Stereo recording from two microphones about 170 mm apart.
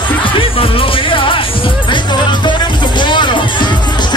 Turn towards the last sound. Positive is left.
turn(degrees=25)  # may be behind; listen again after turning